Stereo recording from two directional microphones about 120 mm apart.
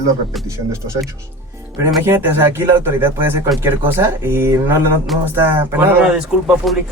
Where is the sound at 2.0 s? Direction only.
20° right (ahead or behind).